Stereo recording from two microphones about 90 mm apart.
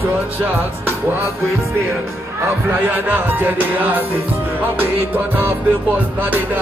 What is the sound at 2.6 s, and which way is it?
Music, 20° right (ahead or behind).